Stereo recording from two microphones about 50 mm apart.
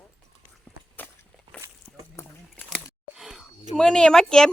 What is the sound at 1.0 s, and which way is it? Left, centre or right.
Walk, left.